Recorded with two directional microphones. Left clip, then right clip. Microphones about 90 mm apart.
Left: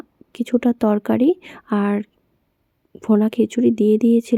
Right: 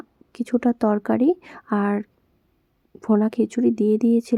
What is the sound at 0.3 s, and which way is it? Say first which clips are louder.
Speech: left 3 dB; 15° left (ahead or behind).